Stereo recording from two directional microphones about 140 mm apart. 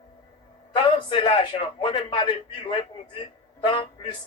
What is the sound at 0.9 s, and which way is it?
A man's voice, 35° left (ahead or behind).